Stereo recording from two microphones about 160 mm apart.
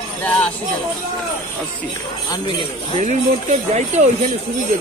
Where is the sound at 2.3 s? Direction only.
25° left (ahead or behind).